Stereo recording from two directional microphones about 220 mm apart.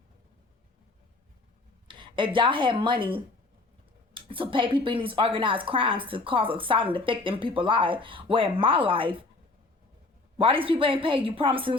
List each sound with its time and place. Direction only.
1.9 s a woman's voice: 20° right (ahead or behind)
10.3 s a woman's voice: 25° right (ahead or behind)